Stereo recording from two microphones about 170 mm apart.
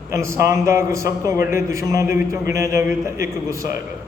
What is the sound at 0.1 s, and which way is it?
A man's voice, 15° right (ahead or behind).